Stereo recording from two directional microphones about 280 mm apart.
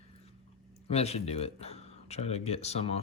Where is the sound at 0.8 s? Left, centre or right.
Left.